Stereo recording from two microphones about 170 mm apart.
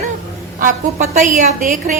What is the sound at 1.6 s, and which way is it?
Speech, 50° right (ahead or behind).